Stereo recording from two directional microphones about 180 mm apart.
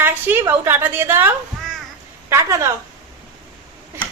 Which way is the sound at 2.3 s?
15° right (ahead or behind).